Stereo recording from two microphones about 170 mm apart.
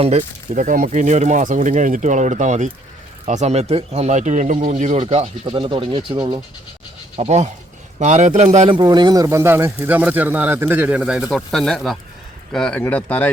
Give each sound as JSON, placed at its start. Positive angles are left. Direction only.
{"t": 0.0, "sound": "speech", "side_deg": -45}
{"t": 5.0, "sound": "speech", "side_deg": -30}
{"t": 7.2, "sound": "speech", "side_deg": -40}
{"t": 8.6, "sound": "speech", "side_deg": -25}